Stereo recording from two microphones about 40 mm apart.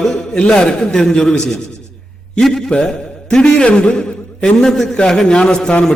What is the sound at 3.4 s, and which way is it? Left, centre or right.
A man's voice, left.